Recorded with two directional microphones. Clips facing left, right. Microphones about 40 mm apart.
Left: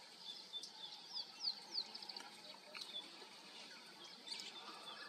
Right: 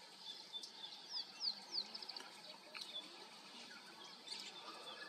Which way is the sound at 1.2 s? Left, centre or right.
Centre.